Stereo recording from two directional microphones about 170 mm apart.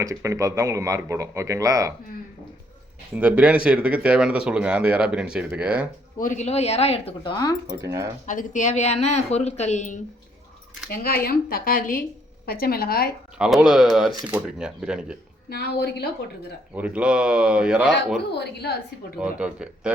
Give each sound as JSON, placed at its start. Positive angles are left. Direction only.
{"t": 0.0, "sound": "speech", "side_deg": -20}
{"t": 3.2, "sound": "speech", "side_deg": -10}
{"t": 6.1, "sound": "speech", "side_deg": 50}
{"t": 7.9, "sound": "speech", "side_deg": -15}
{"t": 8.3, "sound": "speech", "side_deg": 45}
{"t": 10.8, "sound": "speech", "side_deg": 65}
{"t": 13.4, "sound": "speech", "side_deg": -5}
{"t": 15.4, "sound": "a woman's voice", "side_deg": 70}
{"t": 16.7, "sound": "speech", "side_deg": -10}
{"t": 18.3, "sound": "a woman's voice", "side_deg": 75}
{"t": 19.2, "sound": "speech", "side_deg": -5}